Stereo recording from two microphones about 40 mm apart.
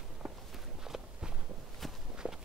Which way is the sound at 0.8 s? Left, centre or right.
Centre.